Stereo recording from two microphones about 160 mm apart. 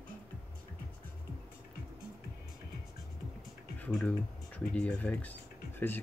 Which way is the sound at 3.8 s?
10° left (ahead or behind).